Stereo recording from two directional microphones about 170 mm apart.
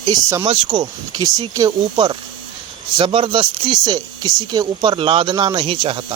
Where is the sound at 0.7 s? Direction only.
25° right (ahead or behind).